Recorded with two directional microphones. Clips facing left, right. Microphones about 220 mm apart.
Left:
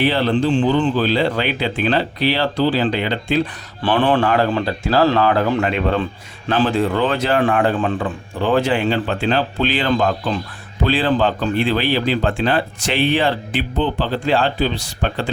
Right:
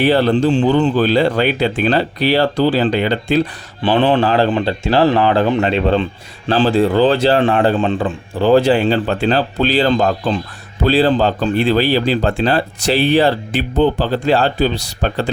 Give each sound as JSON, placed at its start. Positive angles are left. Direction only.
{"t": 0.0, "sound": "speech", "side_deg": -45}
{"t": 3.8, "sound": "speech", "side_deg": -20}